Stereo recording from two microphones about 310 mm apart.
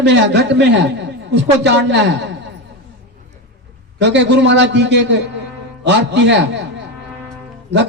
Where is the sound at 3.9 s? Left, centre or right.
Right.